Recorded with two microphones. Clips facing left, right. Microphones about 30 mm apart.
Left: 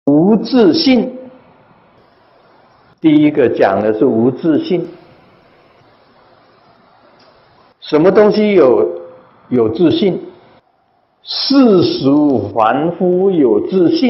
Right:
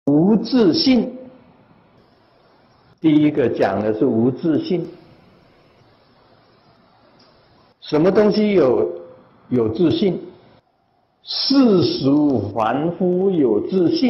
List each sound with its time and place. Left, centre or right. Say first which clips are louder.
0.0 s speech: left 5 dB; centre
0.9 s a sound: left 5 dB; centre
3.0 s speech: left 5 dB; left
3.8 s speech: left 6 dB; centre
7.8 s speech: left 6 dB; left
8.6 s a sound: left 6 dB; centre
9.8 s a man's voice: left 5 dB; centre
11.5 s speech: left 5 dB; centre